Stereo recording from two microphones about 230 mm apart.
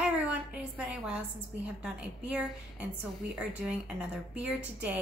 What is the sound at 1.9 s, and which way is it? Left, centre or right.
A woman's voice, centre.